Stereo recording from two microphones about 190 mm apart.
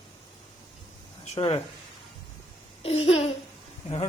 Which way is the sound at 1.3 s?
30° left (ahead or behind).